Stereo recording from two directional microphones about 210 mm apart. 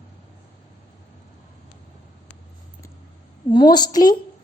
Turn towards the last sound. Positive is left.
turn(degrees=20)  # may be behind; listen again after turning